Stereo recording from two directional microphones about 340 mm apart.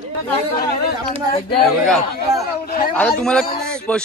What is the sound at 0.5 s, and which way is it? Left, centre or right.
Speech, left.